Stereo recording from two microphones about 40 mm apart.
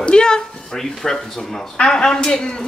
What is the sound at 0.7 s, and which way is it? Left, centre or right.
Speech, centre.